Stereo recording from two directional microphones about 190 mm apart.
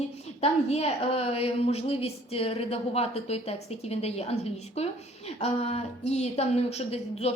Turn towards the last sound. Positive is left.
turn(degrees=35)  # may be behind; listen again after turning